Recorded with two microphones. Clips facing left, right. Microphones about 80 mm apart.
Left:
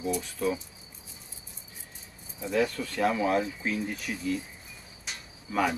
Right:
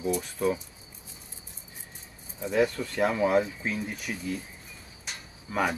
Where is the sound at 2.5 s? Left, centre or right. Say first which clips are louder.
Right 2 dB; centre.